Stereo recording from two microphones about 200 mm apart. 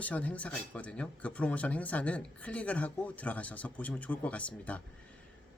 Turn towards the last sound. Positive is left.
turn(degrees=5)  # may be behind; listen again after turning